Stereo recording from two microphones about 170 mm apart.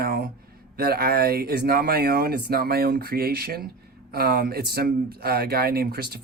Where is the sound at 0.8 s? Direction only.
65° right (ahead or behind).